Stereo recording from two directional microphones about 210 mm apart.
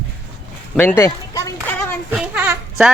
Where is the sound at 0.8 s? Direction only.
10° left (ahead or behind).